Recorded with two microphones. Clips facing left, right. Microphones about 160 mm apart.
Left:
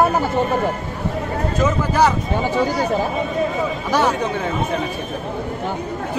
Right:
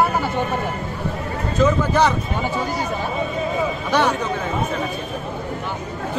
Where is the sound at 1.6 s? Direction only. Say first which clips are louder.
Right 1 dB; 10° left (ahead or behind).